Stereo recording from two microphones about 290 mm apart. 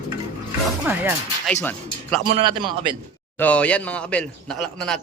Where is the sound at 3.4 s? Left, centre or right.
Centre.